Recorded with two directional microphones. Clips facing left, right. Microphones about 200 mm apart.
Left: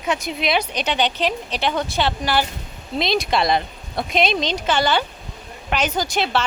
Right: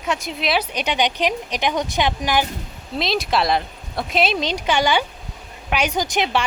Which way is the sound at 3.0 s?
Centre (ahead or behind).